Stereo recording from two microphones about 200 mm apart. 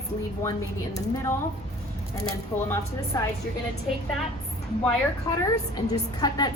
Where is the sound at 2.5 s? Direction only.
10° left (ahead or behind).